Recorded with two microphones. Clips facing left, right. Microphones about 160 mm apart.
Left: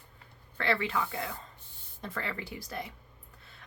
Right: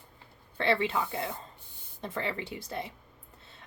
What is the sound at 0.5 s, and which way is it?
Speech, 25° right (ahead or behind).